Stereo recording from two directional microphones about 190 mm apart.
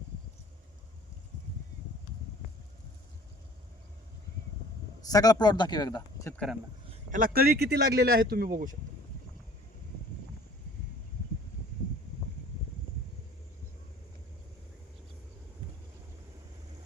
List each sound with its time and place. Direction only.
5.0 s speech: 20° left (ahead or behind)
6.3 s speech: 5° left (ahead or behind)
6.9 s speech: 45° right (ahead or behind)